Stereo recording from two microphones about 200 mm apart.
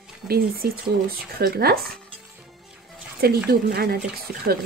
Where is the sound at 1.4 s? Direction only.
50° right (ahead or behind).